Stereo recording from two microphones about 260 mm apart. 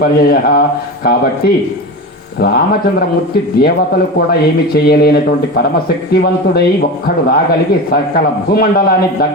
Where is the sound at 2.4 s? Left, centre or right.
Left.